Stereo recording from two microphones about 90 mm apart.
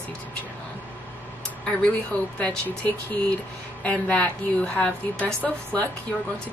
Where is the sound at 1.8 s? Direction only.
15° left (ahead or behind).